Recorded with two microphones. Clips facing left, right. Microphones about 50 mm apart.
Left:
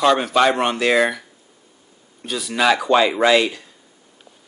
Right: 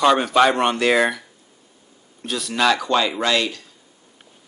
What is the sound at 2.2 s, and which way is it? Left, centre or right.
Speech, centre.